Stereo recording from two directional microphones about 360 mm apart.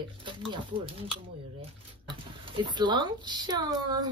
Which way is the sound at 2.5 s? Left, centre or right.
Centre.